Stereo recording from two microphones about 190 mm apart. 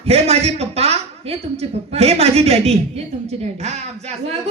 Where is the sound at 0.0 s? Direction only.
30° right (ahead or behind).